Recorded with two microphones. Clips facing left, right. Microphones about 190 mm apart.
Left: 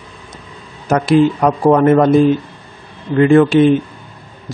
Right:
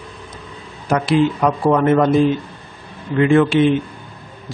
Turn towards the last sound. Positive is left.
turn(degrees=40)  # may be behind; listen again after turning